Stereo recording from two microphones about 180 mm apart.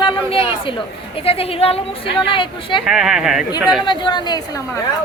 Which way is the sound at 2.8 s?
5° right (ahead or behind).